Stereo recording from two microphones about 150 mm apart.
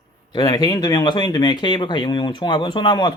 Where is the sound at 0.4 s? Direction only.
25° left (ahead or behind).